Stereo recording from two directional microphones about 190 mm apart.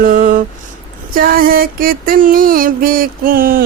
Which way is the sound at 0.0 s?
45° right (ahead or behind).